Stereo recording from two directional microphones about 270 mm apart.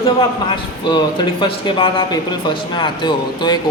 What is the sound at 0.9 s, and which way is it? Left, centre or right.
Speech, centre.